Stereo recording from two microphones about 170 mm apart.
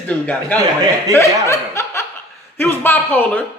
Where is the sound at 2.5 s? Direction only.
10° left (ahead or behind).